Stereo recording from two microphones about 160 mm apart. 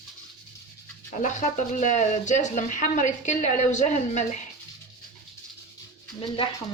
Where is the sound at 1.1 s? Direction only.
50° left (ahead or behind).